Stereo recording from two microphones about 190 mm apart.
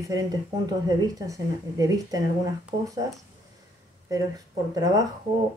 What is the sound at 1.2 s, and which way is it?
Speech, 20° right (ahead or behind).